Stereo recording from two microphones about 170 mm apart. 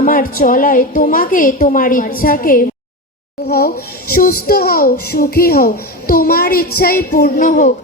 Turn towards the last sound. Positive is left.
turn(degrees=50)  # may be behind; listen again after turning